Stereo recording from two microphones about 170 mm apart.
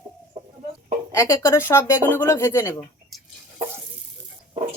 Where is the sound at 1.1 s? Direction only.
15° left (ahead or behind).